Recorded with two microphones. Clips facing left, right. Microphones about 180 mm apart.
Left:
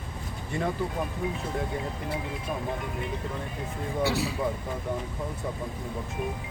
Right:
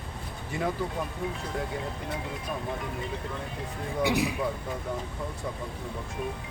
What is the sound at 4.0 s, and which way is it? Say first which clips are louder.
Speech: right 1 dB; 15° right (ahead or behind).